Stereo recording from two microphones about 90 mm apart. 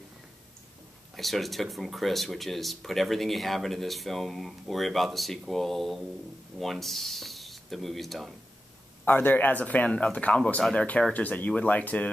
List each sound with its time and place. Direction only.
1.1 s speech: centre (ahead or behind)
9.0 s speech: 25° left (ahead or behind)